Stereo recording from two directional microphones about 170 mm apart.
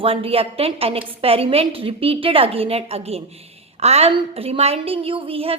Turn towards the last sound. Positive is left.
turn(degrees=-35)  # may be behind; listen again after turning